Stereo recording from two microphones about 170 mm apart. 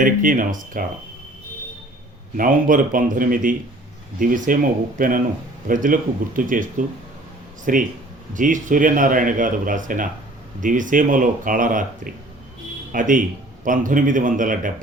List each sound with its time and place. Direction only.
0.0 s speech: 55° right (ahead or behind)
2.3 s speech: 55° right (ahead or behind)